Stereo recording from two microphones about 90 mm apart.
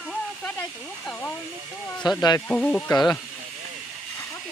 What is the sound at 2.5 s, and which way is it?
Speech, 15° left (ahead or behind).